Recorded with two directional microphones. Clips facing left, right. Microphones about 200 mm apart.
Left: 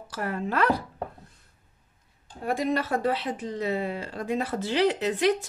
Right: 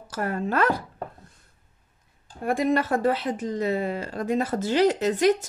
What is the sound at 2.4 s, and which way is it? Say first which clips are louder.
Speech: right 3 dB; 50° right (ahead or behind).